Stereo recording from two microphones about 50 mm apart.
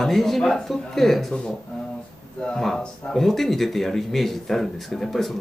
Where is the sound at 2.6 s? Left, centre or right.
Centre.